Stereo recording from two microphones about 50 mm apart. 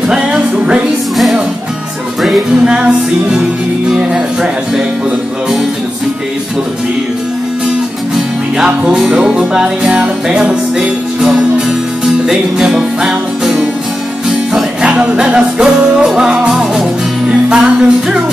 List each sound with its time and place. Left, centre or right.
0.1 s music: centre
2.5 s music: centre
8.6 s music: centre